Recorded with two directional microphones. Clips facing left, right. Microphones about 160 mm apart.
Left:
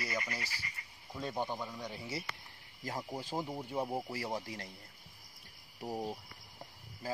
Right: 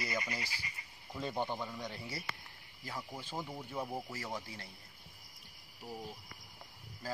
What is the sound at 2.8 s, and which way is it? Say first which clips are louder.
Speech: left 4 dB; 40° left (ahead or behind).